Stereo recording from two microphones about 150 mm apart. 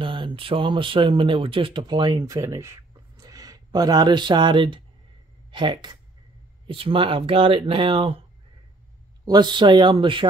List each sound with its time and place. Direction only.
0.0 s speech: 35° right (ahead or behind)
9.2 s speech: 30° right (ahead or behind)